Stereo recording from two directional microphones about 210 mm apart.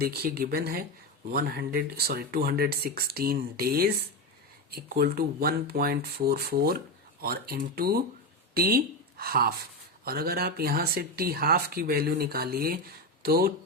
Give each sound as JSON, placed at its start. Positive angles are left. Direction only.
{"t": 0.0, "sound": "speech", "side_deg": -45}